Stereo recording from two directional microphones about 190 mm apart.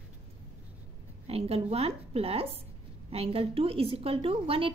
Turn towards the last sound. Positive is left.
turn(degrees=-30)  # may be behind; listen again after turning